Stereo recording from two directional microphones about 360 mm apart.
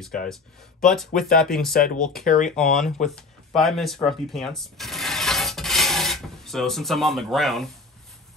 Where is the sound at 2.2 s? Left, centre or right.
Left.